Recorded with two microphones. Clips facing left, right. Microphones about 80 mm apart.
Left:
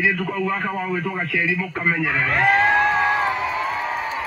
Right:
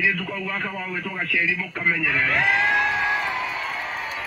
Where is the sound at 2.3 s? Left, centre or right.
Left.